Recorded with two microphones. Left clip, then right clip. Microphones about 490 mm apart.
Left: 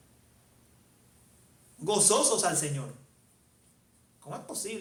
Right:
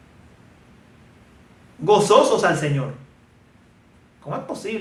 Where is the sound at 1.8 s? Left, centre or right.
Left.